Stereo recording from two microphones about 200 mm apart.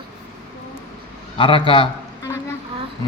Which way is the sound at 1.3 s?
25° left (ahead or behind).